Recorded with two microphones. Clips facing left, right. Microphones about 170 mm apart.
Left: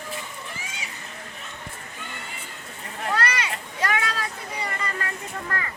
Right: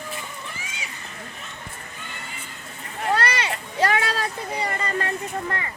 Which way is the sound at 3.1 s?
30° right (ahead or behind).